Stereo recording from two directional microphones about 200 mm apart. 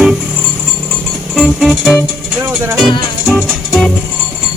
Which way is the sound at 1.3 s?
5° left (ahead or behind).